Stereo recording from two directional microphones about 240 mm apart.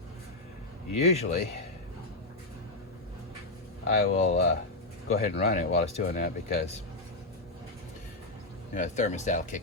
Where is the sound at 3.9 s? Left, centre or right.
Left.